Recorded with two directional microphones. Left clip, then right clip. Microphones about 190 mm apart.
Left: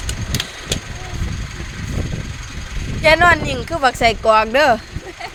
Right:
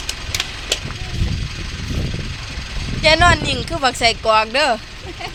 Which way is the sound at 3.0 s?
35° left (ahead or behind).